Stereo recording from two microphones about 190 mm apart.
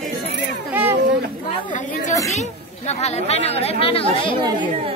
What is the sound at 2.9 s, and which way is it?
Speech, 35° left (ahead or behind).